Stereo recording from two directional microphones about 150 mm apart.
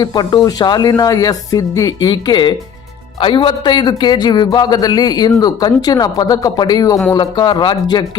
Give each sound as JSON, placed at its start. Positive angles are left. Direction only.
{"t": 0.0, "sound": "a man's voice", "side_deg": 30}